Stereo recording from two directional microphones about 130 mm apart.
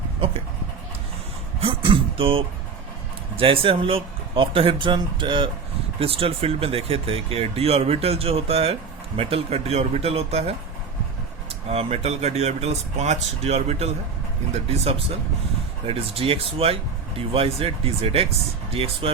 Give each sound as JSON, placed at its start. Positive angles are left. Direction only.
{"t": 1.6, "sound": "speech", "side_deg": -45}
{"t": 11.7, "sound": "speech", "side_deg": -50}
{"t": 15.9, "sound": "speech", "side_deg": -45}